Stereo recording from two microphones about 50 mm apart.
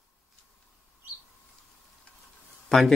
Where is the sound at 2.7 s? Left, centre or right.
Centre.